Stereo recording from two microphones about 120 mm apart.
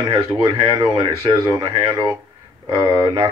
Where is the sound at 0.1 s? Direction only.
30° right (ahead or behind).